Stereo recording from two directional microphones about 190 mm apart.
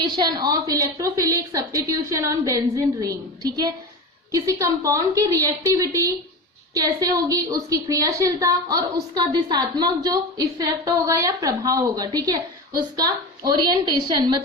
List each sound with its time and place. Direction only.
0.2 s a woman's voice: 20° right (ahead or behind)